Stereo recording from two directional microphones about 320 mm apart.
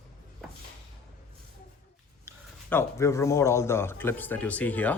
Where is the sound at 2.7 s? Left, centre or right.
Centre.